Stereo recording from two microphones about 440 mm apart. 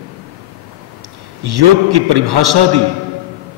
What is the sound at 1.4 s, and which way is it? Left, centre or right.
A man's voice, right.